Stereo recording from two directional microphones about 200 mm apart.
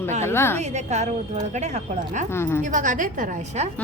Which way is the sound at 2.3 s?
10° left (ahead or behind).